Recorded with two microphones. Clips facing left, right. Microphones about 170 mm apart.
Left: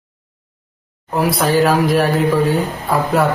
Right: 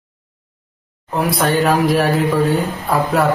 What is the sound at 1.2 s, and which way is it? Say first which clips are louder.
A man's voice: left 2 dB; centre (ahead or behind).